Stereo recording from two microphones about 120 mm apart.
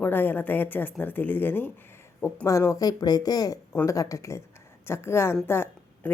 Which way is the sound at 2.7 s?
30° left (ahead or behind).